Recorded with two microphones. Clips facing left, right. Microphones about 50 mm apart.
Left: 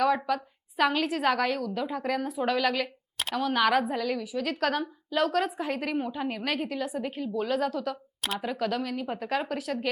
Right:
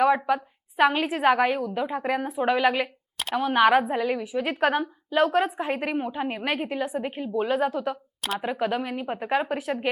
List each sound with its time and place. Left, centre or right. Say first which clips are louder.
0.0 s a woman's voice: right 4 dB; right